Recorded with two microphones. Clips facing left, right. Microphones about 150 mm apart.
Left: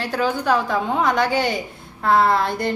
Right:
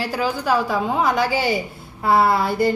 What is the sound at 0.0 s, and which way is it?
A woman's voice, 5° right (ahead or behind).